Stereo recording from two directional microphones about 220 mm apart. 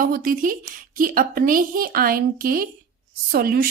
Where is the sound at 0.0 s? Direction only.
40° right (ahead or behind).